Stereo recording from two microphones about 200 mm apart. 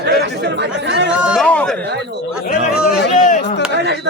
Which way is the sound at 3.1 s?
40° left (ahead or behind).